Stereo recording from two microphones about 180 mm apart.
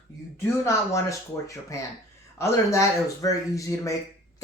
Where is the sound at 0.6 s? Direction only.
15° left (ahead or behind).